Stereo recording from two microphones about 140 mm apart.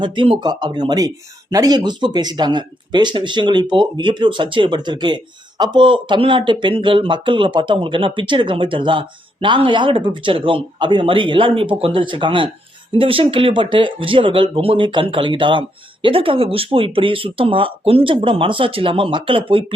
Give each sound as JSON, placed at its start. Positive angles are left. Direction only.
{"t": 0.0, "sound": "speech", "side_deg": -35}